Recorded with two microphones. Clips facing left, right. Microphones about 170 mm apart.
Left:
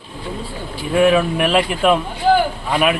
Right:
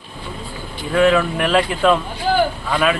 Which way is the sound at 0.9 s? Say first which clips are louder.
Left 1 dB; 15° left (ahead or behind).